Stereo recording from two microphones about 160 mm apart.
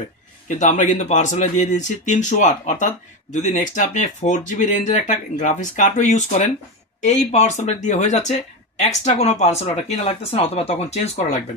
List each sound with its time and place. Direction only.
0.5 s speech: 50° left (ahead or behind)